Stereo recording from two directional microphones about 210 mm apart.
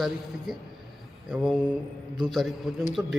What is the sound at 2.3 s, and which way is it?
Speech, centre (ahead or behind).